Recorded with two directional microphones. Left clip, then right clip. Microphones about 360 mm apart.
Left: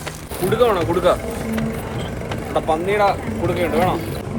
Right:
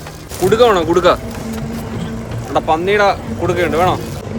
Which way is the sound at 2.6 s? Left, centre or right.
Right.